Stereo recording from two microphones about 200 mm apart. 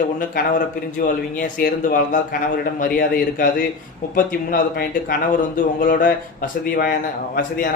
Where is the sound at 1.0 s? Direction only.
40° left (ahead or behind).